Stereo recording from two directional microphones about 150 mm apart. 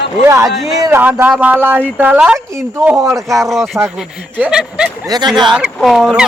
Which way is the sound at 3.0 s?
20° right (ahead or behind).